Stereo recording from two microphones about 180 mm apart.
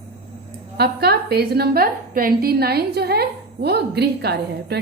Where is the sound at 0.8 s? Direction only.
65° right (ahead or behind).